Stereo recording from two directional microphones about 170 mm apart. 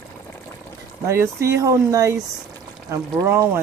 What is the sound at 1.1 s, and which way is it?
Speech, 15° right (ahead or behind).